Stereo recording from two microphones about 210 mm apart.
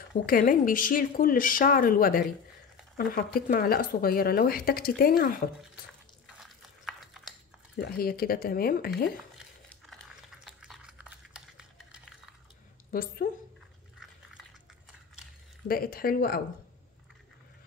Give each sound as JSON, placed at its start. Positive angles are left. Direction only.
{"t": 0.3, "sound": "speech", "side_deg": 40}
{"t": 6.2, "sound": "biting", "side_deg": 0}
{"t": 7.7, "sound": "speech", "side_deg": 45}
{"t": 9.8, "sound": "a sound", "side_deg": 0}
{"t": 12.9, "sound": "speech", "side_deg": 45}
{"t": 15.7, "sound": "speech", "side_deg": 45}